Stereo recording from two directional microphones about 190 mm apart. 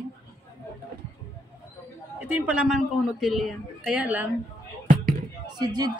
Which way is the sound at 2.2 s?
10° right (ahead or behind).